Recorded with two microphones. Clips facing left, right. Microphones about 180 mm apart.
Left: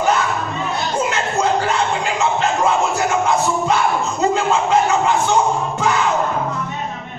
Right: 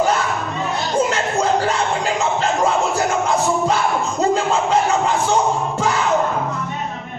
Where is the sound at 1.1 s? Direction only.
35° right (ahead or behind).